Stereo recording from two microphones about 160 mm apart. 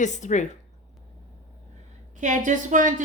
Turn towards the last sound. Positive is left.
turn(degrees=-55)  # may be behind; listen again after turning